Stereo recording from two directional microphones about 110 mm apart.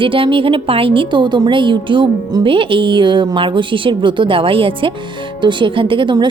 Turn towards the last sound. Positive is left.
turn(degrees=-45)  # may be behind; listen again after turning